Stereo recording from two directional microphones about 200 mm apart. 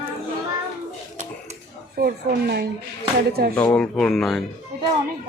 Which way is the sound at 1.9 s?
55° right (ahead or behind).